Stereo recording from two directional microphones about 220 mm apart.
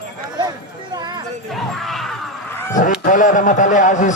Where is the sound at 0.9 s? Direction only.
20° right (ahead or behind).